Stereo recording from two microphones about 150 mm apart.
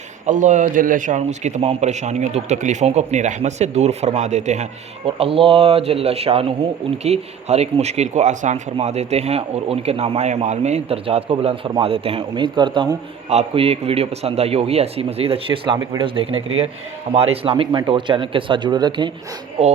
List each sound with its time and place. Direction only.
0.3 s a man's voice: 55° right (ahead or behind)
5.0 s speech: 40° right (ahead or behind)
19.6 s speech: 40° right (ahead or behind)